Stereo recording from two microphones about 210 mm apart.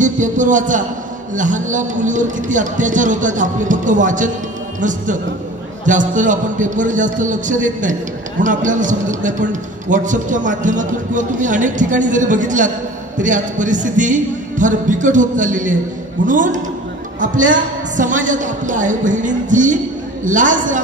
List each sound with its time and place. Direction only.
0.0 s a man's voice: 35° right (ahead or behind)